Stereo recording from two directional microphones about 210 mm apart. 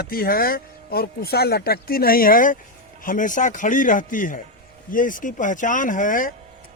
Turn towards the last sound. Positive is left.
turn(degrees=40)  # may be behind; listen again after turning